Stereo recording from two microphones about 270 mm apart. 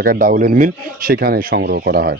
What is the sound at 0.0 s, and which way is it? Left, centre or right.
Speech, right.